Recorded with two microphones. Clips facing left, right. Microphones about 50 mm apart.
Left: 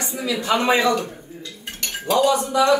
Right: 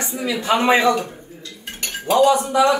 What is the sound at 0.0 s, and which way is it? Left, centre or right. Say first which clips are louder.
Speech: right 1 dB; right.